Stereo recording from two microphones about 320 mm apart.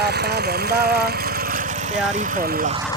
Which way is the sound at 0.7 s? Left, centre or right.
Right.